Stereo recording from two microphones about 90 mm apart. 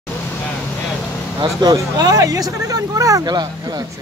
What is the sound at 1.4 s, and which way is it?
Speech, 50° right (ahead or behind).